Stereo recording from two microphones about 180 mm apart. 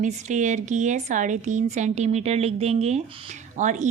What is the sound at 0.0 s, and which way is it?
Speech, 40° right (ahead or behind).